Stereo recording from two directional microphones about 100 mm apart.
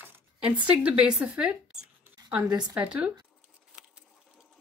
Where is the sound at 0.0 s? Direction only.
15° right (ahead or behind).